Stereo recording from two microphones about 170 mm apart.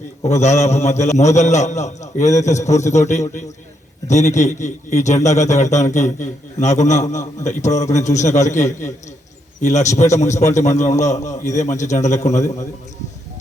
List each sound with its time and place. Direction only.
0.3 s a man's voice: 40° left (ahead or behind)